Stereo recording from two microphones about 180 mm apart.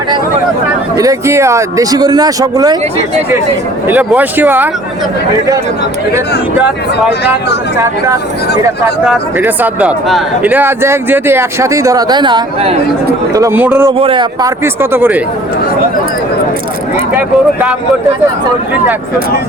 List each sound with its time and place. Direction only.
0.9 s speech: 15° right (ahead or behind)
3.8 s speech: 10° right (ahead or behind)
6.6 s speech: 5° right (ahead or behind)
7.8 s speech: 15° right (ahead or behind)
13.3 s speech: 15° right (ahead or behind)
14.0 s speech: 25° right (ahead or behind)
14.6 s speech: 10° right (ahead or behind)
17.2 s speech: 10° right (ahead or behind)